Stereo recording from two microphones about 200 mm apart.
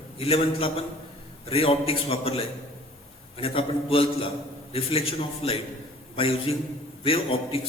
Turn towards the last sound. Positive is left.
turn(degrees=30)  # may be behind; listen again after turning